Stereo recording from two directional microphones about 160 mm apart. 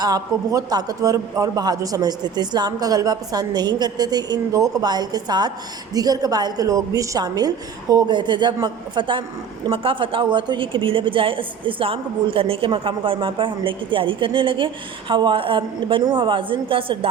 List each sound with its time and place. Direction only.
0.0 s a man's voice: 25° right (ahead or behind)